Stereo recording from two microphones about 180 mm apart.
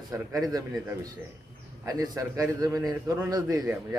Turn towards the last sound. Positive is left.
turn(degrees=-20)  # may be behind; listen again after turning